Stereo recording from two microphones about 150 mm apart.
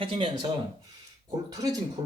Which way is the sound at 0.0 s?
35° right (ahead or behind).